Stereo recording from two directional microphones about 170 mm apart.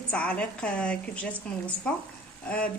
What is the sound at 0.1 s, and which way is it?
Speech, 5° left (ahead or behind).